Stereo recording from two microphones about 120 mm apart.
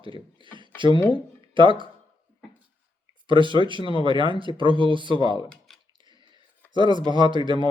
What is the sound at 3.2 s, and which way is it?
Speech, 40° right (ahead or behind).